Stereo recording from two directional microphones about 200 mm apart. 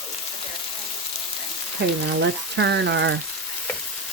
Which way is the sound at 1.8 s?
55° right (ahead or behind).